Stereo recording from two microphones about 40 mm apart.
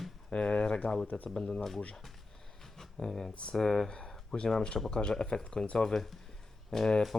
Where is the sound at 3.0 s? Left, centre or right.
Centre.